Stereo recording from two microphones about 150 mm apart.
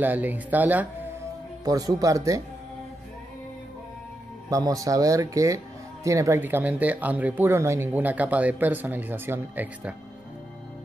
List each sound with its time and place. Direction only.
0.0 s speech: 10° right (ahead or behind)
1.6 s speech: 25° right (ahead or behind)
4.5 s speech: 25° right (ahead or behind)